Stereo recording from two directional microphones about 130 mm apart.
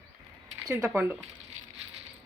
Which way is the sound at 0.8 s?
15° right (ahead or behind).